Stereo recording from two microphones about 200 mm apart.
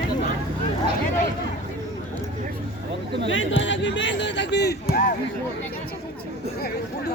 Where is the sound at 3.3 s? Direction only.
70° left (ahead or behind).